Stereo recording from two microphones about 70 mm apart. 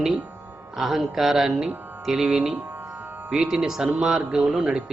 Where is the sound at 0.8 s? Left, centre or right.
Centre.